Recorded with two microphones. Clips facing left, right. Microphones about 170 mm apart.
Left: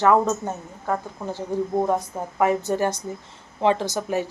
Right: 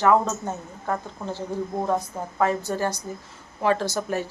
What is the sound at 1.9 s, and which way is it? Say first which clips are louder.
A woman's voice: left 1 dB; 15° left (ahead or behind).